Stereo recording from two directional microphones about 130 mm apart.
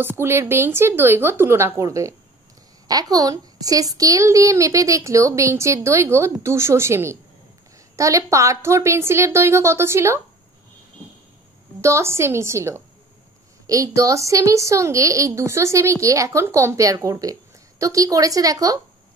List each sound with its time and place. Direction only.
0.0 s a woman's voice: 20° right (ahead or behind)
11.8 s a woman's voice: 20° right (ahead or behind)